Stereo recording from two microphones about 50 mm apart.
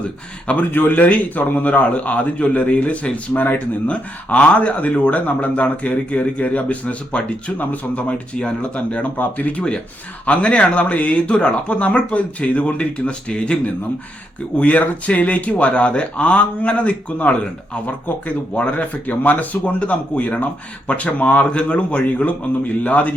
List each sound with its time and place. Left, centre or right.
0.7 s a man's voice: left
4.3 s speech: left
14.6 s a man's voice: left